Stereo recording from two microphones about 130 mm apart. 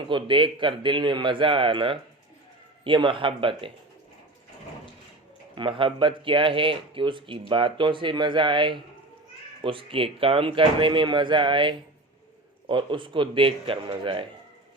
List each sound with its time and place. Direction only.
0.1 s speech: 40° right (ahead or behind)
5.5 s speech: 40° right (ahead or behind)